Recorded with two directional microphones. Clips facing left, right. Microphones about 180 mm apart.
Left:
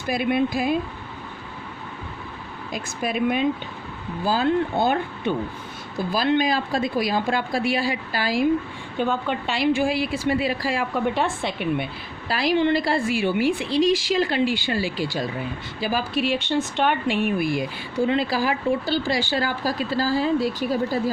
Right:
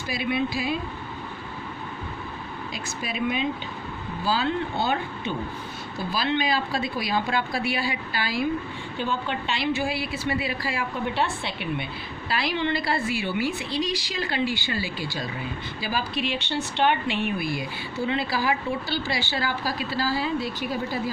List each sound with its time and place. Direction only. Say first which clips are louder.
0.1 s a woman's voice: left 5 dB; 50° left (ahead or behind)
2.7 s a woman's voice: left 7 dB; 50° left (ahead or behind)